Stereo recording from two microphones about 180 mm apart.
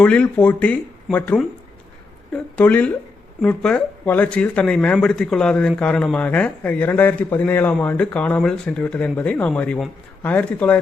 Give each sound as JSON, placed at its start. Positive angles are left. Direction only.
{"t": 0.0, "sound": "speech", "side_deg": 5}